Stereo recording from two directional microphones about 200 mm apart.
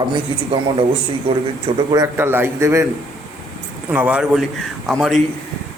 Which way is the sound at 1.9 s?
15° right (ahead or behind).